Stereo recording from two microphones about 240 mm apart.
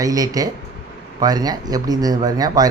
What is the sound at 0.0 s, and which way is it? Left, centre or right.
Speech, centre.